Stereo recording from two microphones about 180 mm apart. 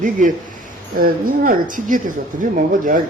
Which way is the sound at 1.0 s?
50° right (ahead or behind).